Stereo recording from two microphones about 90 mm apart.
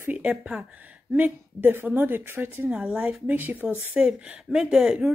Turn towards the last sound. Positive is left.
turn(degrees=-5)  # may be behind; listen again after turning